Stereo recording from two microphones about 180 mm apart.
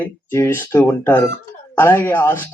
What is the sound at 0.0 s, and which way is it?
Speech, 15° left (ahead or behind).